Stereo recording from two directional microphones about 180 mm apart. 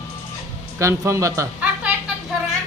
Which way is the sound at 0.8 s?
15° right (ahead or behind).